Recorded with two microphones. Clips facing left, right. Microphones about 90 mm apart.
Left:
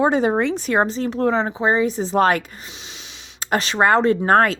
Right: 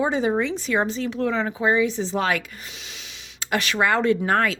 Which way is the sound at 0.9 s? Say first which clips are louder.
Left 4 dB; 40° left (ahead or behind).